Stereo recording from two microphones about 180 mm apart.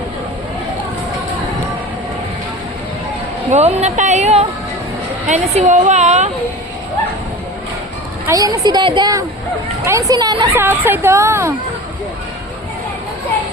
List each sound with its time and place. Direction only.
3.5 s a woman's voice: 40° right (ahead or behind)
8.3 s a woman's voice: 20° right (ahead or behind)
10.6 s a woman's voice: 10° right (ahead or behind)